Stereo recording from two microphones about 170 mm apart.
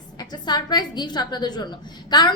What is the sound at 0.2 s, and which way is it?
A woman's voice, 25° left (ahead or behind).